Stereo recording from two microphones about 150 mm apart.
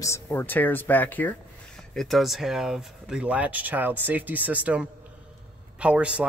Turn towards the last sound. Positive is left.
turn(degrees=-10)  # may be behind; listen again after turning